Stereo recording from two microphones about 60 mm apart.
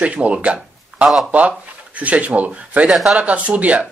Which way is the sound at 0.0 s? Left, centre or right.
Right.